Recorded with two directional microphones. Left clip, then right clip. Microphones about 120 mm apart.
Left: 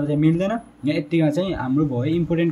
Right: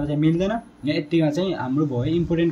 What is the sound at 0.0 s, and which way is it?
A man's voice, 30° left (ahead or behind).